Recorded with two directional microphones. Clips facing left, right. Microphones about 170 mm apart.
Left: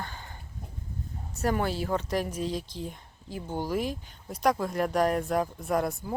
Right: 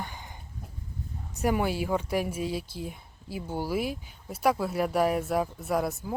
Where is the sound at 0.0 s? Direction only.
15° right (ahead or behind).